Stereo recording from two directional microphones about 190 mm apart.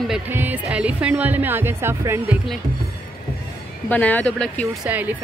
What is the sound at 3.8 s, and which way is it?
Speech, 10° left (ahead or behind).